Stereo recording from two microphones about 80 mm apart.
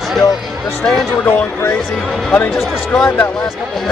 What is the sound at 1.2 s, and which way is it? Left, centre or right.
Speech, left.